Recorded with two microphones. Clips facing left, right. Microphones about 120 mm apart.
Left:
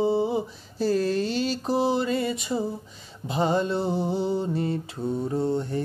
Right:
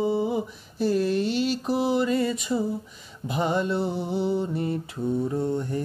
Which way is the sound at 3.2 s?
30° left (ahead or behind).